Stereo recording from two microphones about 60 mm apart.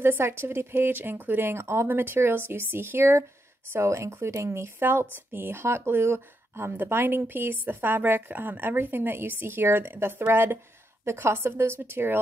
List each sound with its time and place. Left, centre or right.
0.0 s speech: right